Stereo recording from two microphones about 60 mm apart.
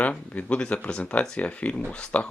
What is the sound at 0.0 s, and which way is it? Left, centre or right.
Speech, left.